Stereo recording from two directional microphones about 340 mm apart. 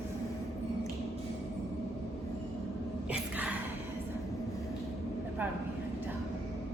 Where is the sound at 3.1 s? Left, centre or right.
Centre.